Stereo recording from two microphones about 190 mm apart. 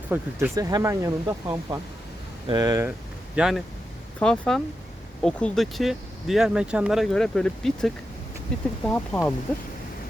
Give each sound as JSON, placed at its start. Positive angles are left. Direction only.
{"t": 0.1, "sound": "speech", "side_deg": -15}
{"t": 3.3, "sound": "speech", "side_deg": -5}